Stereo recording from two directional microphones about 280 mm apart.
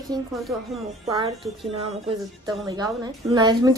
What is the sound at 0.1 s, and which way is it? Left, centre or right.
Speech, centre.